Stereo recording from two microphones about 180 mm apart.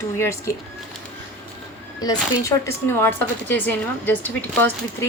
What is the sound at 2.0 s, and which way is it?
Speech, 20° left (ahead or behind).